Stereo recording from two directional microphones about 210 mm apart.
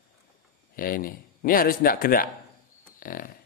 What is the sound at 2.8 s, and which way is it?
Livestock, 40° left (ahead or behind).